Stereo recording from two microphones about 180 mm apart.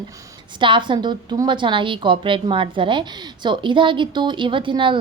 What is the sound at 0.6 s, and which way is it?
A woman's voice, 25° right (ahead or behind).